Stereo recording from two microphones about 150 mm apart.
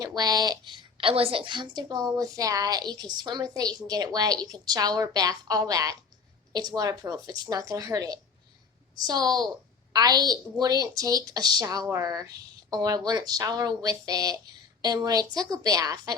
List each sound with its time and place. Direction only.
0.0 s a woman's voice: 25° right (ahead or behind)